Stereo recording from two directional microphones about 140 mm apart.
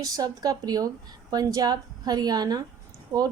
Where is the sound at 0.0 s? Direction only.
25° right (ahead or behind).